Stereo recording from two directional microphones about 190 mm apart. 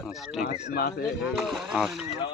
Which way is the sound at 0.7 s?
55° left (ahead or behind).